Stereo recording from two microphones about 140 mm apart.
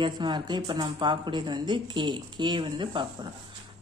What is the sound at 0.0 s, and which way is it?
A woman's voice, 35° right (ahead or behind).